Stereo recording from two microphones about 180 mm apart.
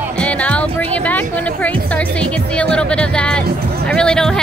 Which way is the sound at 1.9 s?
5° left (ahead or behind).